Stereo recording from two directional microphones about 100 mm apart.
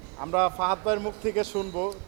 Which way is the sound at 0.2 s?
25° right (ahead or behind).